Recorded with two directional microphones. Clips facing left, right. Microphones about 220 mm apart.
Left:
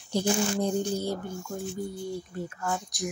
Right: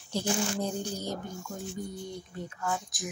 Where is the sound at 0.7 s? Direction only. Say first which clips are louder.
Left 6 dB; 15° right (ahead or behind).